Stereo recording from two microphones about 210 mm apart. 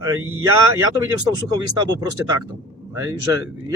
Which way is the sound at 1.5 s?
20° right (ahead or behind).